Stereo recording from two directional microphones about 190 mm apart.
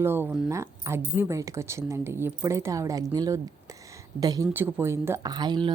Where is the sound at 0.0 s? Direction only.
10° right (ahead or behind).